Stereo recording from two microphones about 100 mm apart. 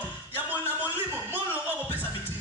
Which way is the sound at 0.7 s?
15° right (ahead or behind).